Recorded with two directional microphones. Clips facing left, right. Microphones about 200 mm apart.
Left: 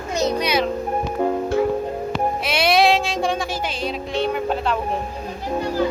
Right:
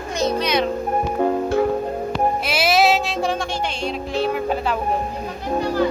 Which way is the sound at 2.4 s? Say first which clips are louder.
Left 2 dB; centre (ahead or behind).